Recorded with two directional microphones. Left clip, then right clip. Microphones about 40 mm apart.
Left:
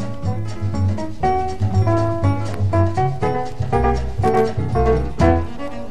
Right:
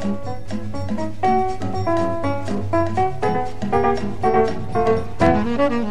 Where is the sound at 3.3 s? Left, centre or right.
Centre.